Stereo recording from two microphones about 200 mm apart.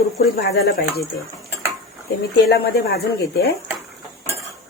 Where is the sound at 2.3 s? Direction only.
55° left (ahead or behind).